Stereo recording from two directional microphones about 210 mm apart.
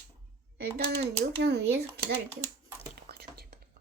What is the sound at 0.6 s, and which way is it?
A child's voice, 50° right (ahead or behind).